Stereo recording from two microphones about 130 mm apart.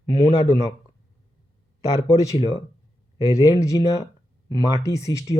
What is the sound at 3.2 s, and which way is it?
Speech, 25° left (ahead or behind).